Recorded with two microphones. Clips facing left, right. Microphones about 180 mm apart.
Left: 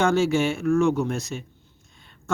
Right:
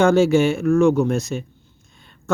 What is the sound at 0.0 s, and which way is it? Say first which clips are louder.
Speech: right 6 dB; 45° right (ahead or behind).